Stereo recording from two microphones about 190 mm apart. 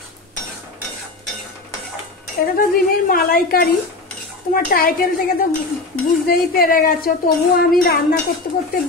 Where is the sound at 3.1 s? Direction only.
50° left (ahead or behind).